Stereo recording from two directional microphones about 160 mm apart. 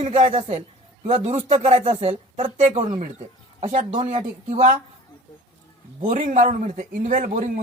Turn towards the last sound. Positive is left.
turn(degrees=-55)  # may be behind; listen again after turning